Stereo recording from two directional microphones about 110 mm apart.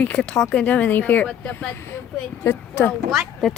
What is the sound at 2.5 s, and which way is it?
Speech, 20° left (ahead or behind).